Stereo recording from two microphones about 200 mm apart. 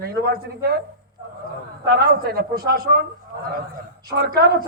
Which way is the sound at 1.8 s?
50° right (ahead or behind).